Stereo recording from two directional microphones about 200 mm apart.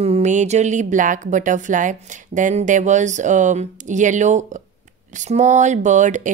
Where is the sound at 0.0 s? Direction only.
35° right (ahead or behind).